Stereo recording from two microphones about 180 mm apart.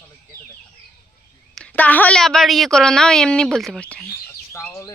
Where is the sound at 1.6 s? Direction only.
5° left (ahead or behind).